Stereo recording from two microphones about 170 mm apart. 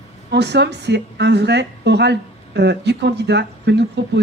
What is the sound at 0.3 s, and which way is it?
A woman's voice, 85° right.